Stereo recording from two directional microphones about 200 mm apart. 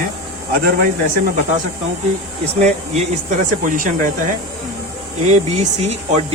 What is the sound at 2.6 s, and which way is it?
Speech, 35° right (ahead or behind).